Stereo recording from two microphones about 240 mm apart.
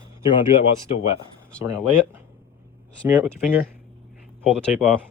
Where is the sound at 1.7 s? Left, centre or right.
Centre.